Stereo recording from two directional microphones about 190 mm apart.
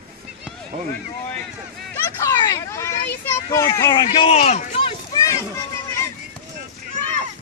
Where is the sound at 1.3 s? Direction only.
10° left (ahead or behind).